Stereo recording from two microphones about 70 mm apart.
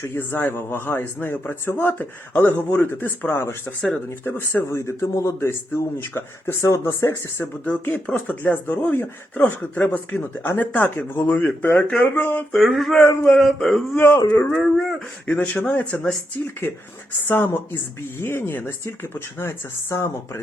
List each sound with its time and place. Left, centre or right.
0.0 s speech: left
4.6 s speech: left
6.7 s speech: left
7.3 s speech: left
12.5 s a sound: centre
13.9 s speech: left
14.5 s a sound: centre
15.3 s speech: left
17.2 s speech: left